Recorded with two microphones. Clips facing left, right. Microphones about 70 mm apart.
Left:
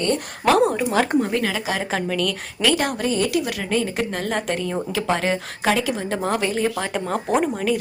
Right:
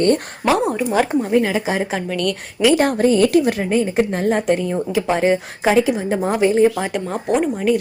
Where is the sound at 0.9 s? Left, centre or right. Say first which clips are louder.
Right 6 dB; centre.